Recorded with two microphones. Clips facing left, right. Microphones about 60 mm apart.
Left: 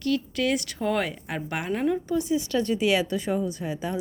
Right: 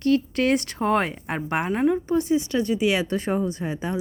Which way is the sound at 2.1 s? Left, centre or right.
Right.